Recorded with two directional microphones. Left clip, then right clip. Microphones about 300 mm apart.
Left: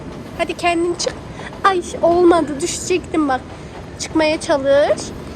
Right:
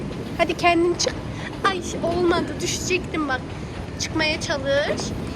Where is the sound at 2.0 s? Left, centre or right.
Left.